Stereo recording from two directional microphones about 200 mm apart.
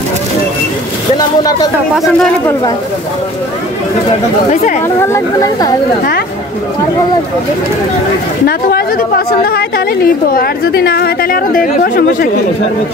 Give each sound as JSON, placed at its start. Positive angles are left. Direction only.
{"t": 1.1, "sound": "boat", "side_deg": 20}
{"t": 2.0, "sound": "speech", "side_deg": 5}
{"t": 4.8, "sound": "speech", "side_deg": 15}
{"t": 8.5, "sound": "a woman's voice", "side_deg": 50}